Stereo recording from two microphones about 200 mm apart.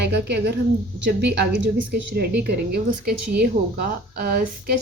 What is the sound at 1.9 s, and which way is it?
Speech, 55° right (ahead or behind).